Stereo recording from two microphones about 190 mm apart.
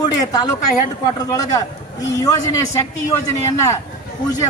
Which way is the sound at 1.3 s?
20° left (ahead or behind).